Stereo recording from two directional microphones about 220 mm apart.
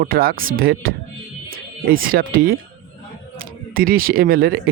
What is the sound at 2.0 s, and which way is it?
Speech, 40° right (ahead or behind).